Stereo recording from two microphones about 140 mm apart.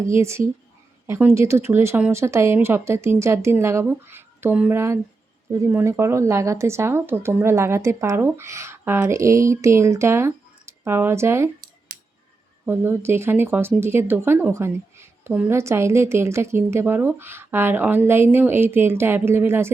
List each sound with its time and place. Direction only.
0.0 s speech: 20° right (ahead or behind)
12.6 s speech: 15° right (ahead or behind)